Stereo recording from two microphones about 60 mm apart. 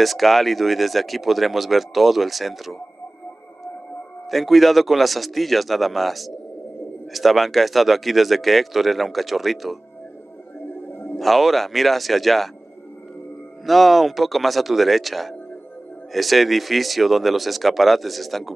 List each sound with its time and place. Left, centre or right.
0.0 s speech: centre
4.3 s speech: centre
10.9 s a sound: left
11.1 s speech: centre
13.7 s speech: centre